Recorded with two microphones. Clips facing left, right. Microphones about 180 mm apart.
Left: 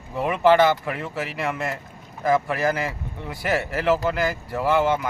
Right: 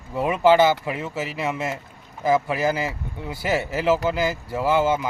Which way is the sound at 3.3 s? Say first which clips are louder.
Right 1 dB; 25° right (ahead or behind).